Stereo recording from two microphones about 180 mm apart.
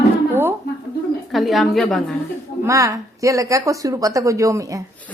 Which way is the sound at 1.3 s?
Centre (ahead or behind).